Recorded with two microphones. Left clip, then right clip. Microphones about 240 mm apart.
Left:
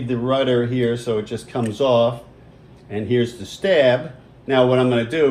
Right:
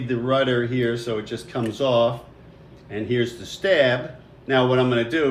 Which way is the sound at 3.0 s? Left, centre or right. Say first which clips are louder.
Left 3 dB; centre.